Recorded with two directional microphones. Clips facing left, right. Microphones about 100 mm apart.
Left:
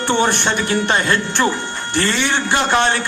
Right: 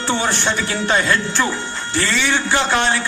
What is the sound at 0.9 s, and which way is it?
A man's voice, 20° left (ahead or behind).